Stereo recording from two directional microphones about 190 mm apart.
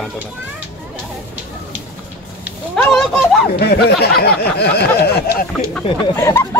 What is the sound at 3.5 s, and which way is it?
Speech, 60° left (ahead or behind).